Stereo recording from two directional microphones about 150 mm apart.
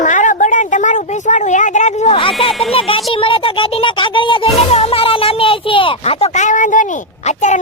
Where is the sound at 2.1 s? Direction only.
35° left (ahead or behind).